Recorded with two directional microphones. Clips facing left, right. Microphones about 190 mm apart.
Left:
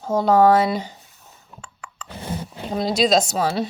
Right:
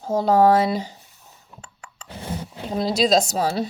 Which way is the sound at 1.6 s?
35° right (ahead or behind).